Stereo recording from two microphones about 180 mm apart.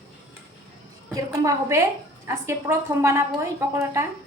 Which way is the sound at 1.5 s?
15° right (ahead or behind).